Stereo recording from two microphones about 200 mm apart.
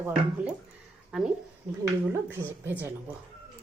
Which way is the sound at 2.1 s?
10° right (ahead or behind).